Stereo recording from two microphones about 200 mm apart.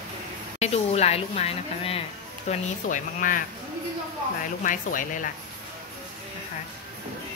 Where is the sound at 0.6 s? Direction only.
35° left (ahead or behind).